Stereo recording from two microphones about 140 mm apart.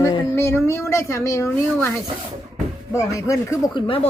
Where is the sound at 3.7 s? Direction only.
40° left (ahead or behind).